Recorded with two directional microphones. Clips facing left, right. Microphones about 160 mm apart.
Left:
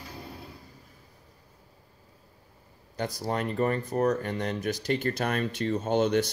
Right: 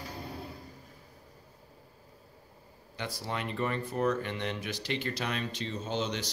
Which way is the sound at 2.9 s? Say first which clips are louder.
Left 6 dB; 40° left (ahead or behind).